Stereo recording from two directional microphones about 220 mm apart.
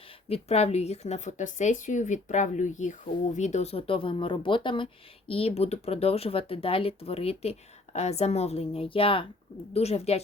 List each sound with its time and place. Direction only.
0.3 s speech: 25° left (ahead or behind)